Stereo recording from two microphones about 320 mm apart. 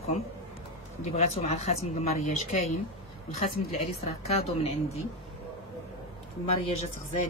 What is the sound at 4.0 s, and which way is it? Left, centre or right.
A woman's voice, centre.